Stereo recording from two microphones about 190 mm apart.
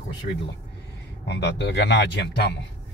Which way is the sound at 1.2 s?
60° left (ahead or behind).